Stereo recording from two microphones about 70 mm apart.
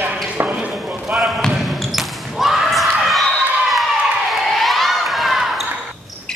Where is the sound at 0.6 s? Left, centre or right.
Right.